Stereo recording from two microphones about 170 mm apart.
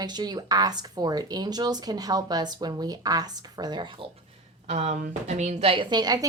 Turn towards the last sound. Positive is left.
turn(degrees=-25)  # may be behind; listen again after turning